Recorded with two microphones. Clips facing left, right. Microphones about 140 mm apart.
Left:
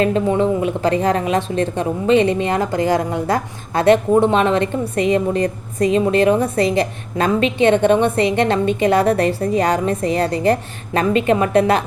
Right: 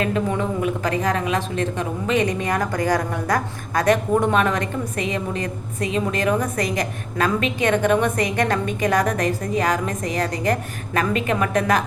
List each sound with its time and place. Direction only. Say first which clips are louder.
0.0 s a woman's voice: left 6 dB; 30° left (ahead or behind)